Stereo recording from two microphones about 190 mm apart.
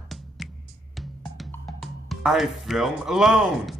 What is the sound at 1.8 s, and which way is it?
Speech, centre (ahead or behind).